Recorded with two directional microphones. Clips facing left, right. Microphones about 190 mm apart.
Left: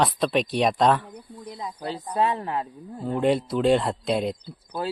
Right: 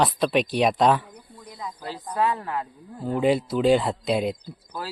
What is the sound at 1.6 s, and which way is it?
Speech, 25° left (ahead or behind).